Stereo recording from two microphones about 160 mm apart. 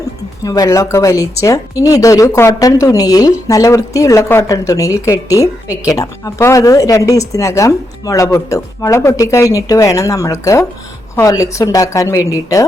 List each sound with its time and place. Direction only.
0.4 s a woman's voice: 20° left (ahead or behind)